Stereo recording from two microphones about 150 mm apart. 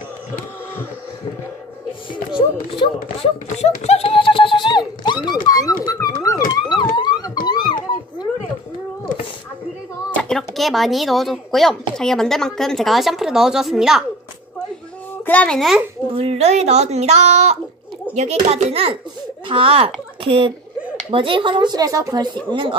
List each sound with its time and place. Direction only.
2.8 s speech: 45° left (ahead or behind); by 5.8 s 25° left (ahead or behind)
5.9 s dog: 20° left (ahead or behind)
7.0 s a sound: 30° left (ahead or behind)
10.1 s speech: 5° left (ahead or behind)
15.2 s speech: 10° left (ahead or behind)
16.2 s a child's voice: 45° right (ahead or behind)